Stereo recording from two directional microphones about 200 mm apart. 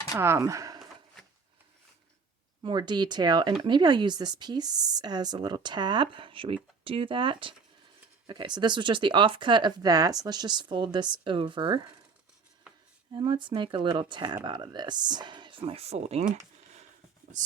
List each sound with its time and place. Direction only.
0.1 s speech: 15° right (ahead or behind)
2.6 s a woman's voice: 20° right (ahead or behind)
13.1 s a woman's voice: 25° right (ahead or behind)
17.4 s a sound: 40° right (ahead or behind)